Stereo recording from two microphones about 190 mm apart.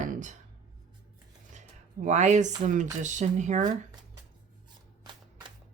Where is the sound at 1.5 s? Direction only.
40° right (ahead or behind).